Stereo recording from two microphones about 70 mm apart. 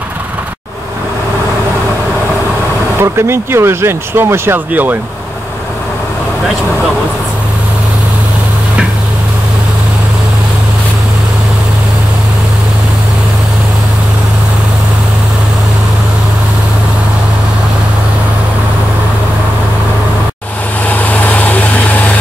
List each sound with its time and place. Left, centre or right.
3.0 s speech: right
20.9 s vehicle: left